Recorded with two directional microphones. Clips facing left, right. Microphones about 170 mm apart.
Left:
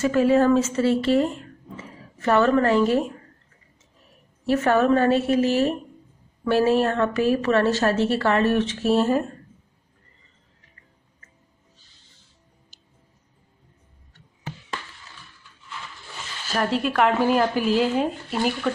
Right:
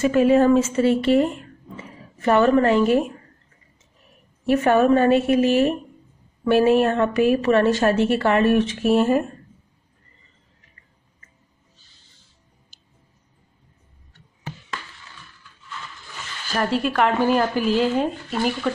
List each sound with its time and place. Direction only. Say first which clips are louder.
0.0 s a woman's voice: right 2 dB; 15° right (ahead or behind)
4.5 s a woman's voice: right 2 dB; 15° right (ahead or behind)
16.5 s speech: right 1 dB; centre (ahead or behind)